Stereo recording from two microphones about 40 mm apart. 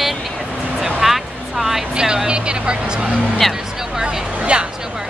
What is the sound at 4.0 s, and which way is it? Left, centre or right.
Speech, right.